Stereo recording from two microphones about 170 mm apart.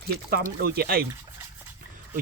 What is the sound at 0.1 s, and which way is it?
Speech, 65° right (ahead or behind).